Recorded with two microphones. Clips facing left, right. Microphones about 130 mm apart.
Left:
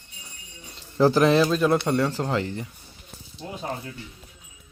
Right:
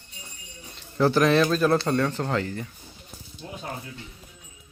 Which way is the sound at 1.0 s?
30° left (ahead or behind).